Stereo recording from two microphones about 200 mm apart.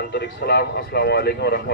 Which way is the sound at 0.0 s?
50° left (ahead or behind).